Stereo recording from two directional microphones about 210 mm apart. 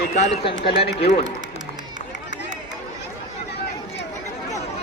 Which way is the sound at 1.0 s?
40° left (ahead or behind).